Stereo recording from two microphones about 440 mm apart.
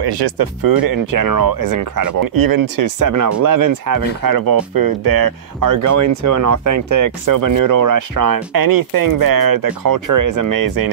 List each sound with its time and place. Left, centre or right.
0.0 s speech: right